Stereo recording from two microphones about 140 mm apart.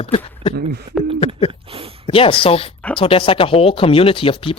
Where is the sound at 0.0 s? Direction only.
40° left (ahead or behind).